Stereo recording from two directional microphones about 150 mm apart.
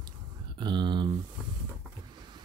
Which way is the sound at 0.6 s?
30° right (ahead or behind).